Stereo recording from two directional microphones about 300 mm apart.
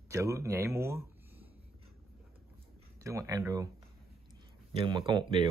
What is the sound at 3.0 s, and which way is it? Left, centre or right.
Speech, centre.